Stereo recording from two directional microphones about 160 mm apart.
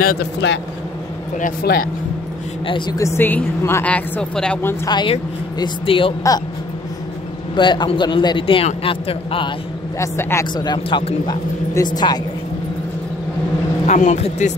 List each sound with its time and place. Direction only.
0.0 s speech: 80° left
1.4 s speech: 65° left (ahead or behind)
2.6 s a man's voice: 30° left (ahead or behind)
3.0 s speech: 15° left (ahead or behind)
4.8 s a man's voice: 30° left (ahead or behind)
7.5 s a man's voice: 30° left (ahead or behind)
9.9 s speech: 20° left (ahead or behind)
13.8 s speech: 45° left (ahead or behind)